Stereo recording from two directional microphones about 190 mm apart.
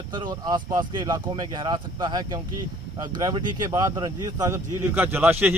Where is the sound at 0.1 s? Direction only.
25° right (ahead or behind).